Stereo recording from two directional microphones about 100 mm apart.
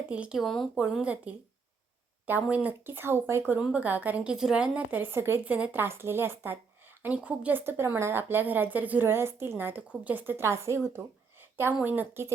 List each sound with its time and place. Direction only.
0.1 s speech: 10° right (ahead or behind)
0.8 s a woman's voice: 10° right (ahead or behind)
3.6 s a woman's voice: 15° right (ahead or behind)
5.5 s a woman's voice: 10° right (ahead or behind)
5.8 s speech: 25° right (ahead or behind)